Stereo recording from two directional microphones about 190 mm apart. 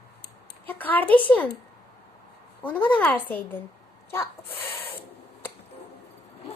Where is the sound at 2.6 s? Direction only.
10° left (ahead or behind).